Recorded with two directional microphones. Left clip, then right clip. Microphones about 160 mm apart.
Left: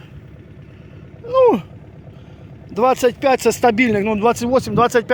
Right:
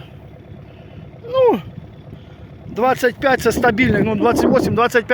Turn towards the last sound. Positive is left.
turn(degrees=0)  # may be behind; listen again after turning